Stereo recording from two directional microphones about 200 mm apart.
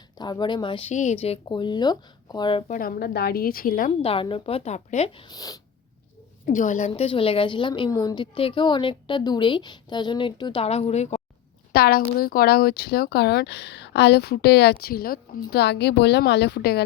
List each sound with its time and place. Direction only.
0.2 s a woman's voice: 20° left (ahead or behind)
0.9 s a woman's voice: 35° left (ahead or behind)
2.7 s speech: 45° left (ahead or behind)
4.0 s a woman's voice: 25° left (ahead or behind)
6.4 s a woman's voice: 40° left (ahead or behind)
11.7 s speech: 50° left (ahead or behind)